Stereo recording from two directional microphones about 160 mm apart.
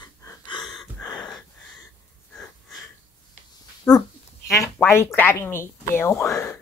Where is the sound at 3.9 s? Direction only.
5° left (ahead or behind).